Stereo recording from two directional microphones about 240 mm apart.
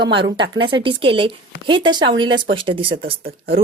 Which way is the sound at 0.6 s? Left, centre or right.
Right.